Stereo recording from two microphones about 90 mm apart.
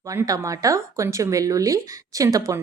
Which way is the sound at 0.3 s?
40° right (ahead or behind).